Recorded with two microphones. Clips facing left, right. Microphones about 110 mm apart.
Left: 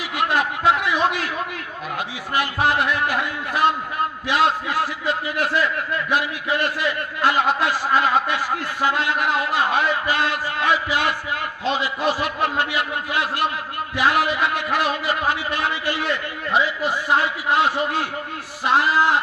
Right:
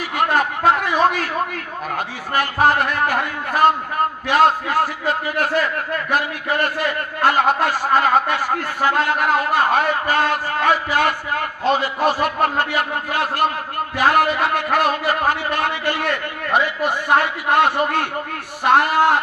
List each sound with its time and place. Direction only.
0.2 s a man's voice: 45° right (ahead or behind)
2.3 s a man's voice: 45° right (ahead or behind)